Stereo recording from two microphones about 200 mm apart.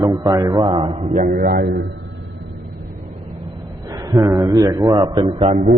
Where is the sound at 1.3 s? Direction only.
50° right (ahead or behind).